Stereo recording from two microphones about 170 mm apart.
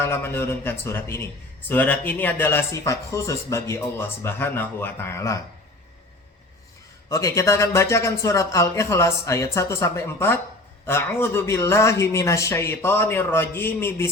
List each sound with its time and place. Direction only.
0.0 s a man's voice: 15° left (ahead or behind)
7.1 s a man's voice: 20° left (ahead or behind)